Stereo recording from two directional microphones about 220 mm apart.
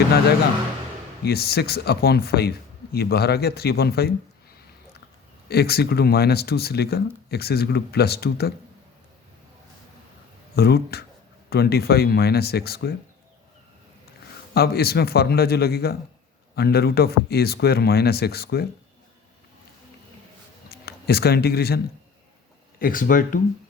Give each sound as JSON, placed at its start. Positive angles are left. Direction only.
{"t": 1.2, "sound": "speech", "side_deg": 45}
{"t": 5.5, "sound": "speech", "side_deg": 45}
{"t": 10.5, "sound": "speech", "side_deg": 45}
{"t": 14.5, "sound": "speech", "side_deg": 45}
{"t": 20.7, "sound": "a sound", "side_deg": 45}
{"t": 22.8, "sound": "speech", "side_deg": 40}